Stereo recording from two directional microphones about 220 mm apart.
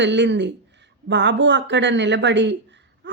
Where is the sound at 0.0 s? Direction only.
55° right (ahead or behind).